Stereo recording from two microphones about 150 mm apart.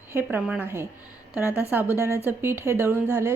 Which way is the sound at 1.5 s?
20° left (ahead or behind).